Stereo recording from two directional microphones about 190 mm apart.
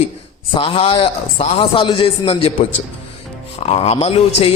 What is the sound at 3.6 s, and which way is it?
Speech, 35° left (ahead or behind).